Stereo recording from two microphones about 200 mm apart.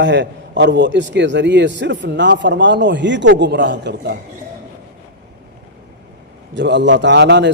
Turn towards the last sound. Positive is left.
turn(degrees=-60)  # may be behind; listen again after turning